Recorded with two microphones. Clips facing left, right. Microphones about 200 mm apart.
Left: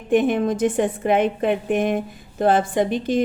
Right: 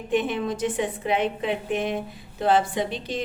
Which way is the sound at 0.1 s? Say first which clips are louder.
Left 7 dB; 50° left (ahead or behind).